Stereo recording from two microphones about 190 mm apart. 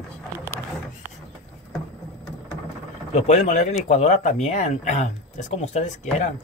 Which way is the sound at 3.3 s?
40° left (ahead or behind).